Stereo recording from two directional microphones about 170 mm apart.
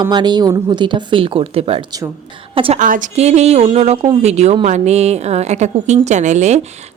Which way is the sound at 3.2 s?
40° right (ahead or behind).